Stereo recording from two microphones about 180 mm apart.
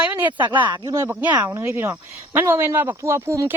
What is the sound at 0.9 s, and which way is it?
A woman's voice, 10° right (ahead or behind).